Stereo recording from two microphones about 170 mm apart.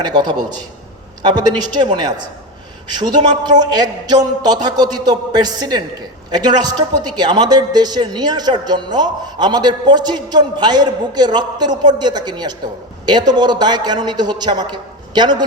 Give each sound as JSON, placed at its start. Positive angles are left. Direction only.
{"t": 0.0, "sound": "a man's voice", "side_deg": -25}